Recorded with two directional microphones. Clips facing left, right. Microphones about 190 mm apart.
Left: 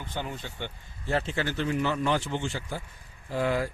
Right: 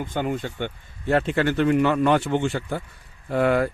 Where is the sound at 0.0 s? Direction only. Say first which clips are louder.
Right 10 dB; 55° right (ahead or behind).